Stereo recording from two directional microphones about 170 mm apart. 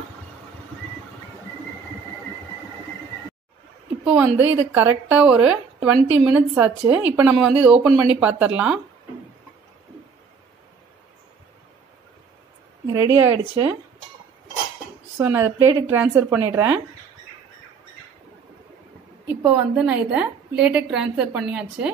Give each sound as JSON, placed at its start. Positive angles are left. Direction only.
{"t": 4.0, "sound": "a woman's voice", "side_deg": -5}
{"t": 12.8, "sound": "a woman's voice", "side_deg": -20}
{"t": 15.1, "sound": "a woman's voice", "side_deg": -15}
{"t": 19.2, "sound": "a woman's voice", "side_deg": -10}